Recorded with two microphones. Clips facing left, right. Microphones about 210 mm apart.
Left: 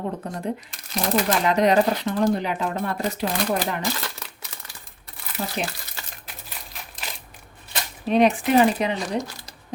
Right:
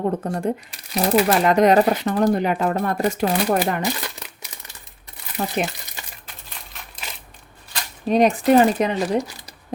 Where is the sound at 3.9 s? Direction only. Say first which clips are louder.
Right 2 dB; 15° right (ahead or behind).